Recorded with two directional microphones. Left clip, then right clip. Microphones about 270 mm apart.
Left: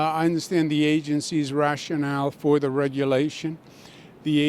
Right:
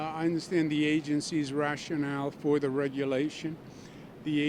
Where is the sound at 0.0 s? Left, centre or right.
Left.